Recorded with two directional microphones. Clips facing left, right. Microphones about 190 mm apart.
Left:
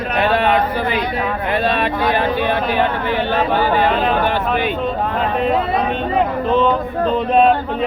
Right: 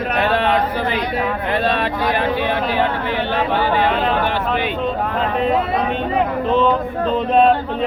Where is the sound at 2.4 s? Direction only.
50° left (ahead or behind).